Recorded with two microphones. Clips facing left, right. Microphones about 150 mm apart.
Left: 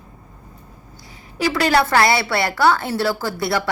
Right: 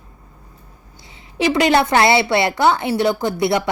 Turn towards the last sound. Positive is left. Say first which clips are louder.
# right 4 dB
turn(degrees=-20)  # may be behind; listen again after turning